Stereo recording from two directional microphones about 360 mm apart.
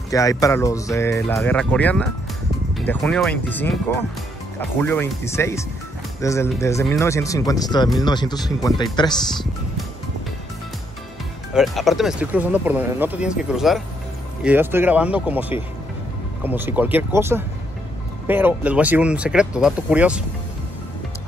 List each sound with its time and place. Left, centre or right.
0.1 s speech: centre
11.5 s speech: centre